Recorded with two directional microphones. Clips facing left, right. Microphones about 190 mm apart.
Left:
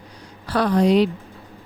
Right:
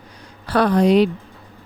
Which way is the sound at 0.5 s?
60° right (ahead or behind).